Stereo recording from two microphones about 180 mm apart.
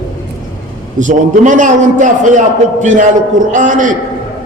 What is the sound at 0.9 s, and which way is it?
A man's voice, 45° right (ahead or behind).